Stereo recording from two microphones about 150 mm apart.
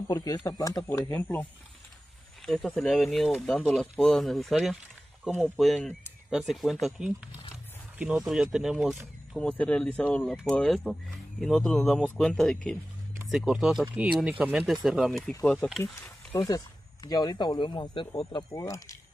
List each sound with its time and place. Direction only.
0.1 s speech: 25° left (ahead or behind)
16.3 s speech: 25° left (ahead or behind)